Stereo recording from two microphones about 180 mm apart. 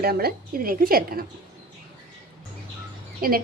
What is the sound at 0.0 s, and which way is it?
A woman's voice, 60° right (ahead or behind).